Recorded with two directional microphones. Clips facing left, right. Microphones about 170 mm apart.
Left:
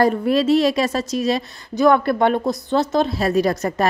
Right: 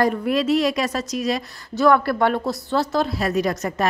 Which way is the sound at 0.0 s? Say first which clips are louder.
Left 3 dB; 30° left (ahead or behind).